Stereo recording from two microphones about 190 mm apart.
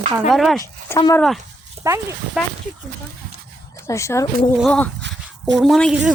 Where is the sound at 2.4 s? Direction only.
Centre (ahead or behind).